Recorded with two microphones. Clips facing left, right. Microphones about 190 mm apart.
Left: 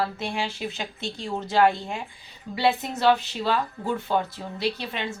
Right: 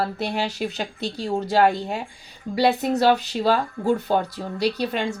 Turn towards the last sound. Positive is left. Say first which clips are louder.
# right 5 dB
turn(degrees=-40)  # may be behind; listen again after turning